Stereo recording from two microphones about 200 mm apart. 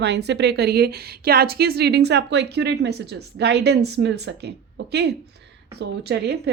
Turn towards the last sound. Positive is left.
turn(degrees=-55)  # may be behind; listen again after turning